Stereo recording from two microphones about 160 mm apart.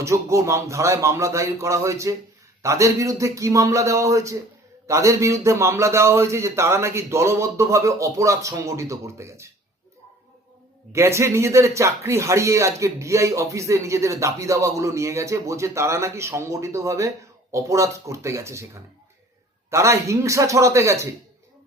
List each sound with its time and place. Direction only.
0.0 s speech: 20° right (ahead or behind)
10.9 s speech: 15° right (ahead or behind)
19.7 s speech: 20° right (ahead or behind)